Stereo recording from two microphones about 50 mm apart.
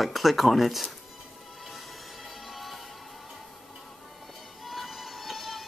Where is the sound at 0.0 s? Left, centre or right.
Centre.